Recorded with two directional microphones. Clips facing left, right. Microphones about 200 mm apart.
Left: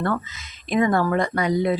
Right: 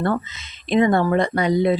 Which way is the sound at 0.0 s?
25° right (ahead or behind).